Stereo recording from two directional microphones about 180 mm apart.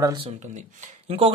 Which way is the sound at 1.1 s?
35° right (ahead or behind).